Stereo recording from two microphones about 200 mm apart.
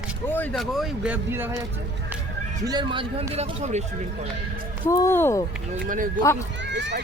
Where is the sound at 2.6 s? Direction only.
25° right (ahead or behind).